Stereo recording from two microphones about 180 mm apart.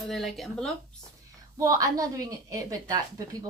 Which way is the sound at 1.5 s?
20° right (ahead or behind).